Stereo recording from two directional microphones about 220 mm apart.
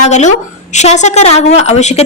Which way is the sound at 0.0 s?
30° left (ahead or behind).